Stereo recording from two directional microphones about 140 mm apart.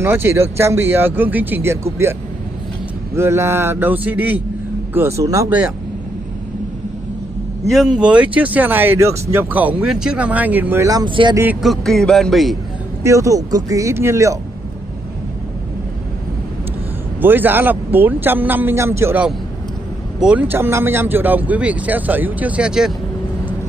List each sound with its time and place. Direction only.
0.0 s speech: 20° right (ahead or behind)
3.2 s speech: 20° right (ahead or behind)
7.6 s speech: centre (ahead or behind)
10.9 s speech: 30° right (ahead or behind)
11.6 s speech: centre (ahead or behind)
13.0 s speech: 20° right (ahead or behind)
17.2 s speech: 15° right (ahead or behind)